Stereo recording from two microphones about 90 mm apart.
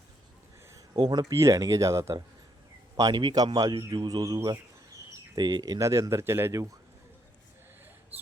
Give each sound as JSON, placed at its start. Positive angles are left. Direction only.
{"t": 0.9, "sound": "speech", "side_deg": -55}
{"t": 1.2, "sound": "a man's voice", "side_deg": -35}
{"t": 5.8, "sound": "speech", "side_deg": -35}